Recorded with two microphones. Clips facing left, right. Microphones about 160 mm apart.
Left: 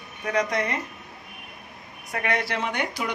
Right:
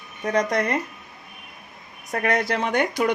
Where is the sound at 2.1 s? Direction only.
40° right (ahead or behind).